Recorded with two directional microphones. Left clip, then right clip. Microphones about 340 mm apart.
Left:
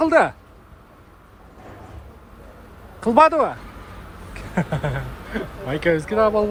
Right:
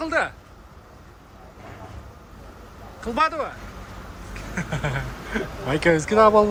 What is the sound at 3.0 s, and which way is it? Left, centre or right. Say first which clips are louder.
Speech: left 8 dB; centre.